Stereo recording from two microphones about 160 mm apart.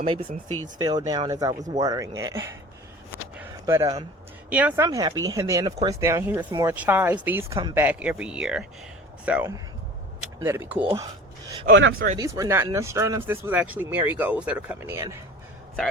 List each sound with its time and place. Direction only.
0.0 s speech: 35° right (ahead or behind)
0.4 s speech: 15° left (ahead or behind)
0.8 s speech: 25° right (ahead or behind)
3.3 s a sound: 15° right (ahead or behind)
4.4 s speech: 10° right (ahead or behind)
4.9 s speech: 20° right (ahead or behind)
6.7 s speech: 10° right (ahead or behind)
11.6 s speech: 65° right (ahead or behind)
12.1 s speech: 20° right (ahead or behind)